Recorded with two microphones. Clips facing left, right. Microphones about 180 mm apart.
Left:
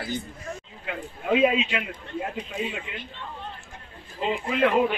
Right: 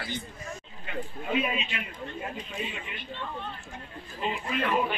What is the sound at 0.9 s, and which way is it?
Speech, 90° left.